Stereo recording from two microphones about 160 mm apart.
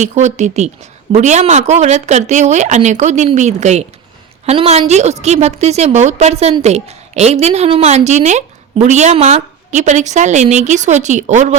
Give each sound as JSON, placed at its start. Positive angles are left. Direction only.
{"t": 0.0, "sound": "a woman's voice", "side_deg": -45}